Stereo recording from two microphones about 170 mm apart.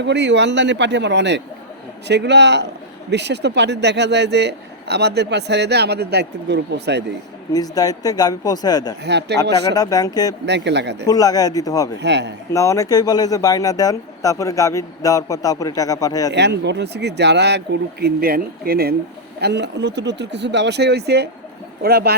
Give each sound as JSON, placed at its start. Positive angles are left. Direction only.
{"t": 0.0, "sound": "speech", "side_deg": -90}
{"t": 7.5, "sound": "speech", "side_deg": 20}
{"t": 9.0, "sound": "speech", "side_deg": -85}
{"t": 9.7, "sound": "speech", "side_deg": 20}
{"t": 10.4, "sound": "speech", "side_deg": -90}
{"t": 11.0, "sound": "speech", "side_deg": 20}
{"t": 12.0, "sound": "speech", "side_deg": -85}
{"t": 12.5, "sound": "speech", "side_deg": 20}
{"t": 16.3, "sound": "speech", "side_deg": -90}
{"t": 18.0, "sound": "speech", "side_deg": -60}
{"t": 19.4, "sound": "speech", "side_deg": -85}